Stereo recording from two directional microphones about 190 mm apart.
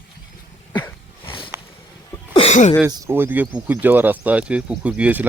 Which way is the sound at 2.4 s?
35° left (ahead or behind).